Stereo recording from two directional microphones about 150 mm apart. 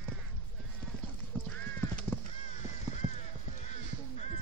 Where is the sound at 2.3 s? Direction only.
45° left (ahead or behind).